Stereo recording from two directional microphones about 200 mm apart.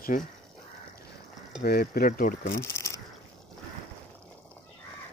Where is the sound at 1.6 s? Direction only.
50° left (ahead or behind).